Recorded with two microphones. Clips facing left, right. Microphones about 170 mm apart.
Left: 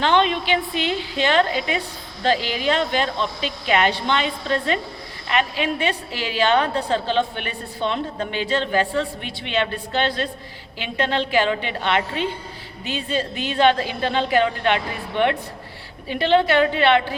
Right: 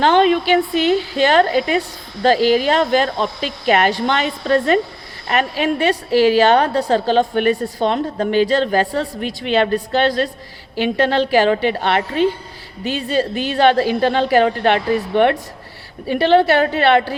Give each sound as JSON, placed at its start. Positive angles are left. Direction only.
{"t": 0.0, "sound": "a woman's voice", "side_deg": -40}